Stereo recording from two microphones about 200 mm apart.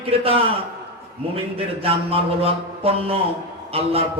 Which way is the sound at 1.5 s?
30° right (ahead or behind).